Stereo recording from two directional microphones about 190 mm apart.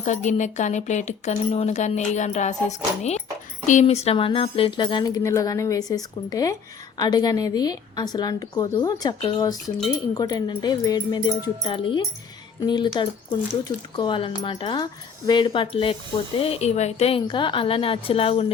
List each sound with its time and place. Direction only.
0.0 s speech: 40° left (ahead or behind)